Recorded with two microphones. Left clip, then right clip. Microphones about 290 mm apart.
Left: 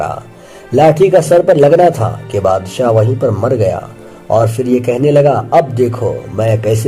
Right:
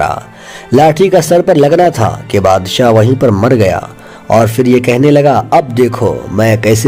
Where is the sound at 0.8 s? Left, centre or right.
Right.